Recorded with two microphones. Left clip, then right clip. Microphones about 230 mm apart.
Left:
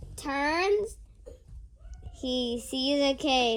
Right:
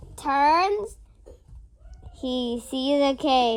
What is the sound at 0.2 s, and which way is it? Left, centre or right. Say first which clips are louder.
Speech: right 9 dB; right.